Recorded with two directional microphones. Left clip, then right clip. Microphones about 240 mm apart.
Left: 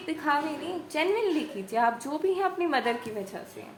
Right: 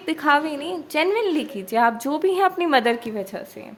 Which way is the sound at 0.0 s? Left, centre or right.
Right.